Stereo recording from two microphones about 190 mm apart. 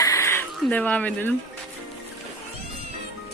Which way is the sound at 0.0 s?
15° left (ahead or behind).